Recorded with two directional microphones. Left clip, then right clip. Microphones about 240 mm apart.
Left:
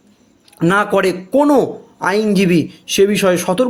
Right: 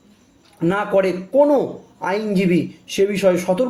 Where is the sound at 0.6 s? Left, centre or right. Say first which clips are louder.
Left 4 dB; left.